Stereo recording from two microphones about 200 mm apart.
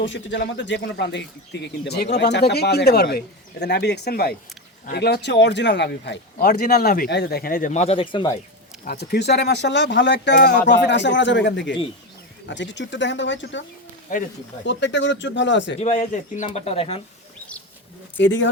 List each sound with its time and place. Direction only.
0.0 s speech: 65° left (ahead or behind); by 8.4 s 25° left (ahead or behind)
8.8 s speech: 50° left (ahead or behind)
14.1 s a man's voice: 40° left (ahead or behind)
14.6 s speech: 60° left (ahead or behind)
15.8 s a man's voice: 35° left (ahead or behind)
18.2 s speech: 65° left (ahead or behind)